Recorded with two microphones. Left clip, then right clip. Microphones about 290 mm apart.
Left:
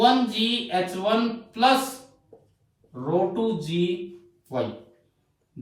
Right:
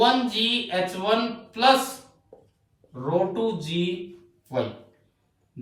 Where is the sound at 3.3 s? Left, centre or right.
Centre.